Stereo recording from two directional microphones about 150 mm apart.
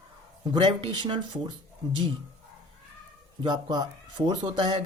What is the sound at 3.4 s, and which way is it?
Speech, 30° right (ahead or behind).